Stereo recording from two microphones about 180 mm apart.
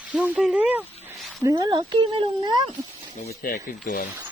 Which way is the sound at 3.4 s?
55° left (ahead or behind).